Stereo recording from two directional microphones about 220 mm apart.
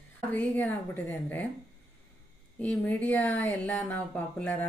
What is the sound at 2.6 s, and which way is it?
Speech, 5° left (ahead or behind).